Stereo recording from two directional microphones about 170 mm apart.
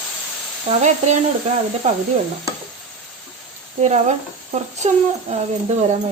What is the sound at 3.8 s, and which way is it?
Speech, 45° right (ahead or behind).